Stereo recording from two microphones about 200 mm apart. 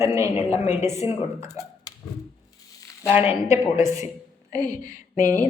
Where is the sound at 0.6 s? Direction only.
35° left (ahead or behind).